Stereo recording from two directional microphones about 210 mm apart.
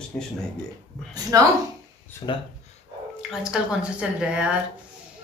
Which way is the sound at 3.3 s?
5° right (ahead or behind).